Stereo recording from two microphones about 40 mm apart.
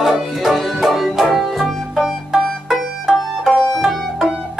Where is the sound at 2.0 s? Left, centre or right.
Centre.